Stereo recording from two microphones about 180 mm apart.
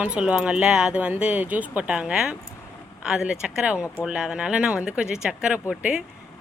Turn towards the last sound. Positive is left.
turn(degrees=-5)  # may be behind; listen again after turning